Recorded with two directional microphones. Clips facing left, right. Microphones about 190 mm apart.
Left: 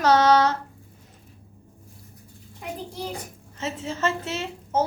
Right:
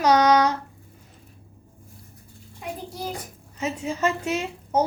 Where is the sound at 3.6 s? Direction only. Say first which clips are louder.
Right 2 dB; 15° right (ahead or behind).